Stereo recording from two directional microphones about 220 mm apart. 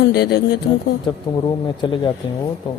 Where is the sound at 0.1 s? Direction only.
45° left (ahead or behind).